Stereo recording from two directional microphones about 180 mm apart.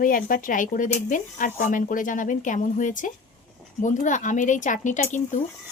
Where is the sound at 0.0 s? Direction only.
50° left (ahead or behind).